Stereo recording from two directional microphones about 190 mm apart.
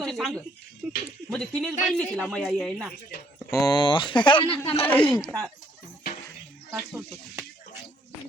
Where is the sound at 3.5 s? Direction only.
20° left (ahead or behind).